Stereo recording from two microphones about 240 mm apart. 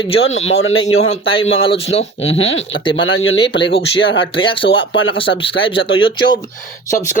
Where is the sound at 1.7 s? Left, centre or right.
Left.